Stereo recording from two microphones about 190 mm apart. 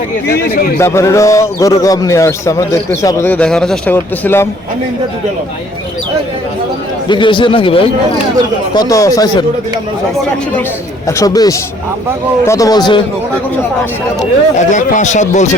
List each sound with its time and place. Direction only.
0.3 s speech: 50° left (ahead or behind)
0.8 s a man's voice: 15° left (ahead or behind)
7.1 s a man's voice: 25° left (ahead or behind)
11.0 s a man's voice: 15° left (ahead or behind)
14.7 s a man's voice: 40° left (ahead or behind)